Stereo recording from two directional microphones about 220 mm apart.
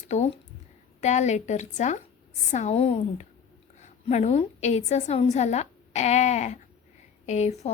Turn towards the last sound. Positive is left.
turn(degrees=30)  # may be behind; listen again after turning